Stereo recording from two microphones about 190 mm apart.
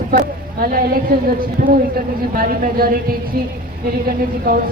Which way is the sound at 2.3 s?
45° right (ahead or behind).